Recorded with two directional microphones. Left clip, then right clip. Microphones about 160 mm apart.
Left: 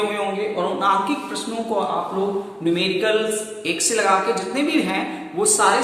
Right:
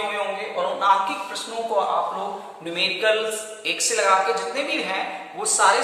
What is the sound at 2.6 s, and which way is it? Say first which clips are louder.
A man's voice: left 1 dB; centre (ahead or behind).